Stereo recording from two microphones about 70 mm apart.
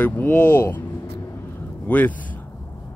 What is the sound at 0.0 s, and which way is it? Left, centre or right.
Vehicle, left.